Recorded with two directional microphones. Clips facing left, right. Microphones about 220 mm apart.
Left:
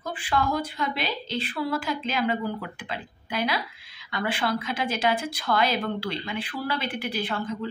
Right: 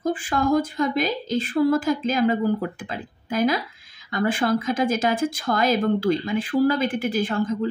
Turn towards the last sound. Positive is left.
turn(degrees=-45)  # may be behind; listen again after turning